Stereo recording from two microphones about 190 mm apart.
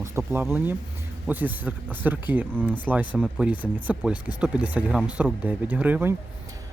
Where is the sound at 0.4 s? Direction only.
10° right (ahead or behind).